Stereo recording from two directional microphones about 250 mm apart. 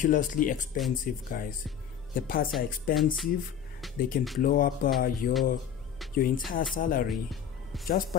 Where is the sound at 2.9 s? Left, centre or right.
Left.